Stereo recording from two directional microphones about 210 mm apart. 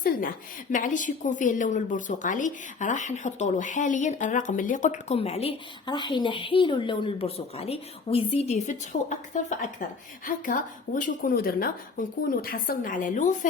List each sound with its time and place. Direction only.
0.7 s a woman's voice: 35° left (ahead or behind)